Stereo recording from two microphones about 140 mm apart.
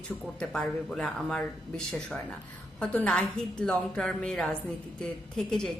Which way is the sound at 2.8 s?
10° left (ahead or behind).